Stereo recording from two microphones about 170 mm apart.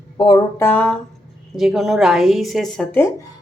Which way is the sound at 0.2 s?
25° left (ahead or behind).